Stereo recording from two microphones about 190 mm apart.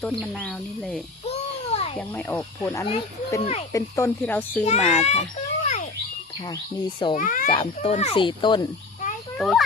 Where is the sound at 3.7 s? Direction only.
15° left (ahead or behind).